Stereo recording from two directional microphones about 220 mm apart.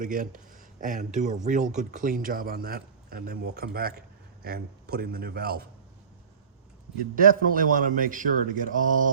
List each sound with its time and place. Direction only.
0.0 s a man's voice: 40° right (ahead or behind)
7.2 s speech: 40° right (ahead or behind)